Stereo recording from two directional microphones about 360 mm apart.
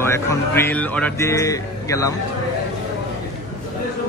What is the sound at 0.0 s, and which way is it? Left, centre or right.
Music, centre.